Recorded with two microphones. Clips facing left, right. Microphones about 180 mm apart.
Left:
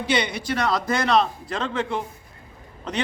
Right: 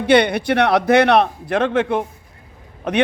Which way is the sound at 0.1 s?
60° right (ahead or behind).